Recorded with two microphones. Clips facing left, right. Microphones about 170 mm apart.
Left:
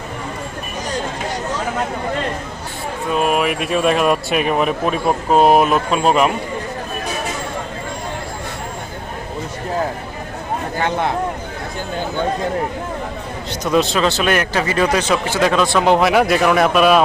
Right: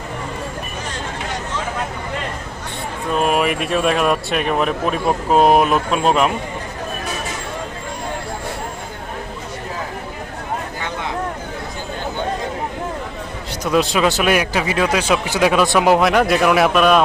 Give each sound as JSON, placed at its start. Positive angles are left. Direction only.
{"t": 3.1, "sound": "speech", "side_deg": 0}
{"t": 13.7, "sound": "speech", "side_deg": -10}
{"t": 15.9, "sound": "speech", "side_deg": 0}